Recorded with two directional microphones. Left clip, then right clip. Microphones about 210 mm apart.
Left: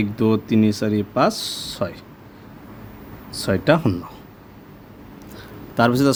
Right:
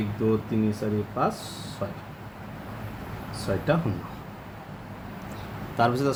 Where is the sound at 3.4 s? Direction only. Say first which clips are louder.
Left 8 dB; 50° left (ahead or behind).